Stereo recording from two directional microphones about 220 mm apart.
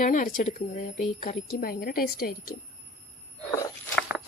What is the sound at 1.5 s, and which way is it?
Speech, 45° left (ahead or behind).